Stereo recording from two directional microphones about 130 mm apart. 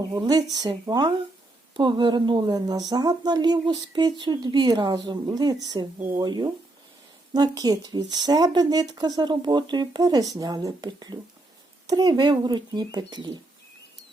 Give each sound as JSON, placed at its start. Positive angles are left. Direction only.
{"t": 0.1, "sound": "speech", "side_deg": -30}